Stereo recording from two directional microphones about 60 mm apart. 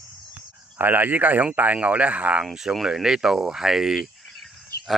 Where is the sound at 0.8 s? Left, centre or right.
Right.